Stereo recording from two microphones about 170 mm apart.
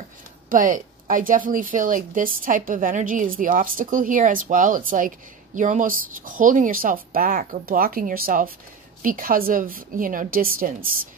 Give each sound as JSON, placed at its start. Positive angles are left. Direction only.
{"t": 0.5, "sound": "a woman's voice", "side_deg": -50}